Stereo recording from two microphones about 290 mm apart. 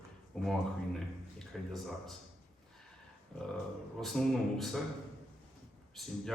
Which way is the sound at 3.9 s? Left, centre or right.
Centre.